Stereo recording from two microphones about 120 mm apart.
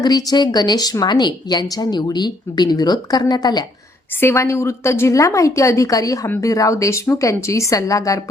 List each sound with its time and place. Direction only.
0.0 s a woman's voice: 35° left (ahead or behind)
4.2 s a woman's voice: 20° left (ahead or behind)